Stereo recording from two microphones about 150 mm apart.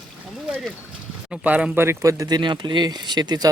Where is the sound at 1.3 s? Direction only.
10° right (ahead or behind).